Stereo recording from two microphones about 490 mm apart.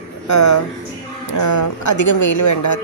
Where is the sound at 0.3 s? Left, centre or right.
Left.